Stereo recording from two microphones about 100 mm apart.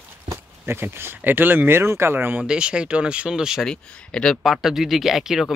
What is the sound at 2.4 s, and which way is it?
Speech, 10° right (ahead or behind).